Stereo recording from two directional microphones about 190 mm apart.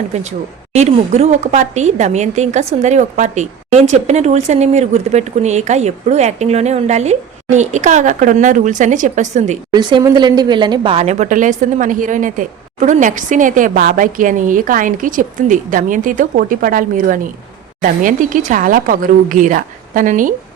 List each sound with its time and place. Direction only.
0.1 s speech: 35° right (ahead or behind)
9.7 s speech: 20° right (ahead or behind); by 20.3 s 45° right (ahead or behind)